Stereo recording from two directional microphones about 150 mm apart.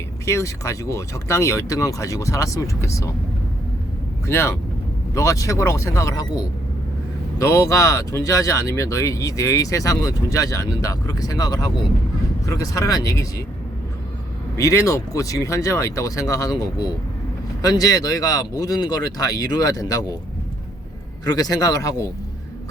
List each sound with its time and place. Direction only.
0.3 s speech: 20° left (ahead or behind)
4.3 s speech: 15° left (ahead or behind)
14.5 s speech: 20° left (ahead or behind)
21.2 s speech: 25° left (ahead or behind)